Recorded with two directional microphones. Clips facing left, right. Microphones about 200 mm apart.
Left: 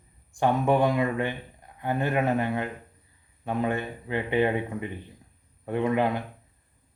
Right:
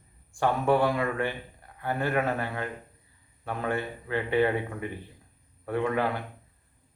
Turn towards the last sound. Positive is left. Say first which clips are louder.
# left 2 dB
turn(degrees=20)  # may be behind; listen again after turning